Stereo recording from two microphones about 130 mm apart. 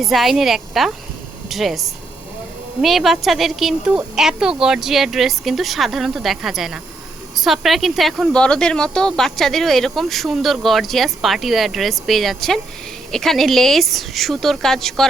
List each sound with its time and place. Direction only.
0.0 s speech: centre (ahead or behind)